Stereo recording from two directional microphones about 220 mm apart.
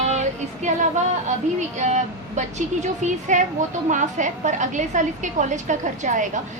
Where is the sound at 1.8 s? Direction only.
30° right (ahead or behind).